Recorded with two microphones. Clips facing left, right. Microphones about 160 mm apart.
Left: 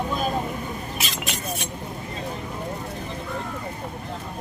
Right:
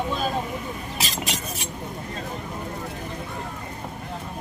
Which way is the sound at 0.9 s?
35° right (ahead or behind).